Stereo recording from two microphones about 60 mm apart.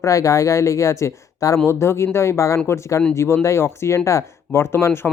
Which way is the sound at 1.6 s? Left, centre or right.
Left.